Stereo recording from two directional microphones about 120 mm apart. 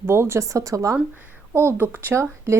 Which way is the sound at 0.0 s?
20° right (ahead or behind).